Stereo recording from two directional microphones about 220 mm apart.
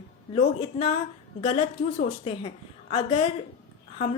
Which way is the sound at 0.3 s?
25° left (ahead or behind).